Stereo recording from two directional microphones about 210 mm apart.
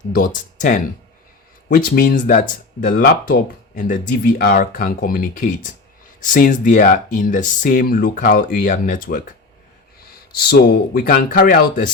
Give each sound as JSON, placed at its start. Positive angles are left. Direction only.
{"t": 0.1, "sound": "speech", "side_deg": 40}
{"t": 10.5, "sound": "speech", "side_deg": 45}